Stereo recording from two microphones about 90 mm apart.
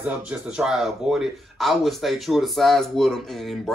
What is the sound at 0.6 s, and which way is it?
Speech, 5° right (ahead or behind).